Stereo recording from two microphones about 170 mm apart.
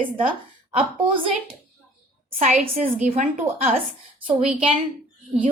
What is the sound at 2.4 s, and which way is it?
Speech, 45° right (ahead or behind).